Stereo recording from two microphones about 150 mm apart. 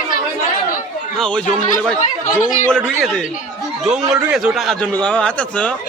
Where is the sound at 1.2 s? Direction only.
5° left (ahead or behind).